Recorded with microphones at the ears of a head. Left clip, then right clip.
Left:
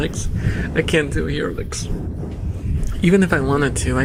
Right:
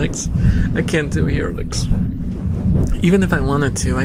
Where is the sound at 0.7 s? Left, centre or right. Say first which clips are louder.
Left 2 dB; centre.